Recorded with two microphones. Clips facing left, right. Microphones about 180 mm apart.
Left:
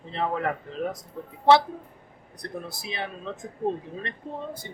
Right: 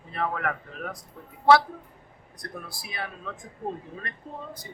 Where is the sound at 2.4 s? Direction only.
20° left (ahead or behind).